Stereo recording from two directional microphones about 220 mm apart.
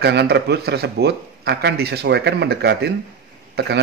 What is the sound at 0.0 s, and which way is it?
A man's voice, 50° right (ahead or behind).